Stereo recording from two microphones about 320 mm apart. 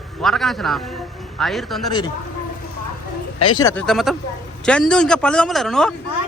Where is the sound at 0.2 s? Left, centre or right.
Centre.